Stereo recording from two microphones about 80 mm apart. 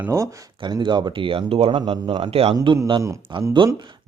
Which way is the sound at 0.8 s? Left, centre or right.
Right.